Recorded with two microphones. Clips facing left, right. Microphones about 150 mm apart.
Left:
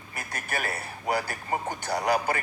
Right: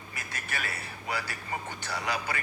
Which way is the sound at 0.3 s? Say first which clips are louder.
Left 5 dB; 50° left (ahead or behind).